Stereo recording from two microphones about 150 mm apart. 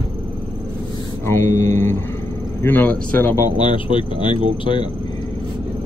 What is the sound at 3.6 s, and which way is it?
Speech, 35° left (ahead or behind).